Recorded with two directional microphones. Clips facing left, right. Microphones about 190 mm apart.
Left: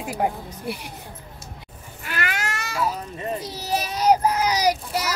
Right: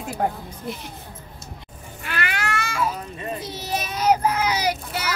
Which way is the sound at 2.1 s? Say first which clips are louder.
Right 2 dB; 40° left (ahead or behind).